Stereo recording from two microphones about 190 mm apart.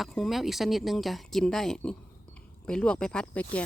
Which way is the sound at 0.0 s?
Centre (ahead or behind).